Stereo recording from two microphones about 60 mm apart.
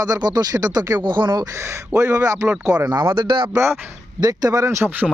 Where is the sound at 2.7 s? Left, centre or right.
Right.